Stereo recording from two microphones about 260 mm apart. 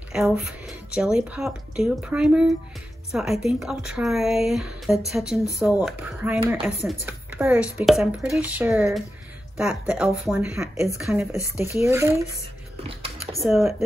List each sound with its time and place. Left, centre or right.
0.9 s speech: centre
12.8 s typing: right
13.4 s speech: centre